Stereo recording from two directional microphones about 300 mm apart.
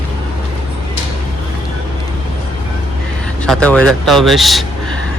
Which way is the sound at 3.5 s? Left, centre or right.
Centre.